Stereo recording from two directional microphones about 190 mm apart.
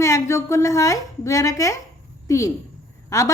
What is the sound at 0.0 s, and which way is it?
A woman's voice, 15° left (ahead or behind).